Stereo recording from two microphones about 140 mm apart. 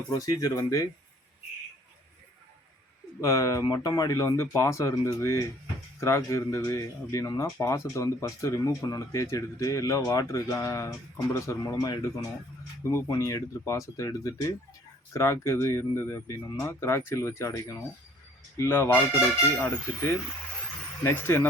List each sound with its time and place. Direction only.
0.1 s speech: 25° left (ahead or behind)
3.2 s speech: 25° left (ahead or behind)